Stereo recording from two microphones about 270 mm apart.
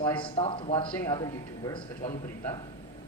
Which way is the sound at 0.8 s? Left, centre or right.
Centre.